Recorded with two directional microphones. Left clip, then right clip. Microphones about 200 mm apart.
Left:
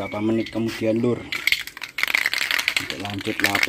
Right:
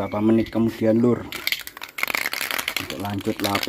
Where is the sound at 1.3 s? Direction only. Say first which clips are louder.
Left 5 dB; 45° right (ahead or behind).